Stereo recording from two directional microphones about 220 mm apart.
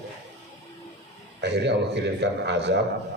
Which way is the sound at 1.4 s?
50° right (ahead or behind).